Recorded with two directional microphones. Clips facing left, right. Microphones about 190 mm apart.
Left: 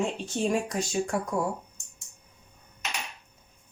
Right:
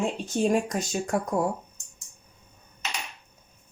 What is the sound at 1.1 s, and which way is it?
Speech, 50° right (ahead or behind).